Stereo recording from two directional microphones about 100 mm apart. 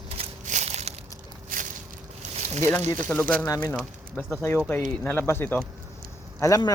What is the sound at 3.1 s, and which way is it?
Speech, 20° left (ahead or behind).